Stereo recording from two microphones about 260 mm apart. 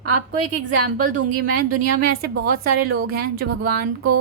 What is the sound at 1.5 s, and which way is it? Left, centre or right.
A woman's voice, right.